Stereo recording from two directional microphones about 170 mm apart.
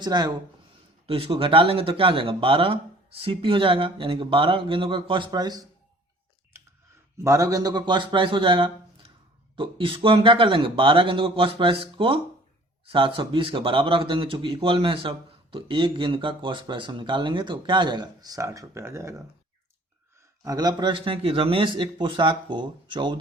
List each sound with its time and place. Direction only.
0.0 s a man's voice: 25° right (ahead or behind)
7.2 s a man's voice: 20° right (ahead or behind)
20.4 s a man's voice: 20° right (ahead or behind)